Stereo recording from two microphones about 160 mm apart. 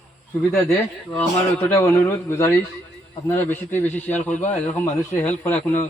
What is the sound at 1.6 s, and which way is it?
A man's voice, 10° left (ahead or behind).